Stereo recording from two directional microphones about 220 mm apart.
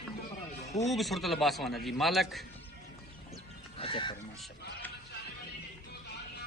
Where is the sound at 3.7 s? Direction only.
25° left (ahead or behind).